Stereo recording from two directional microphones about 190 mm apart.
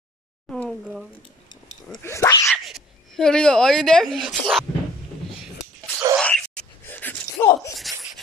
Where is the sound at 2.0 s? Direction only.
15° left (ahead or behind).